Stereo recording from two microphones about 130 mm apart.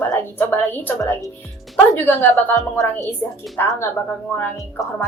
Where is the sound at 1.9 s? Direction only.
15° left (ahead or behind).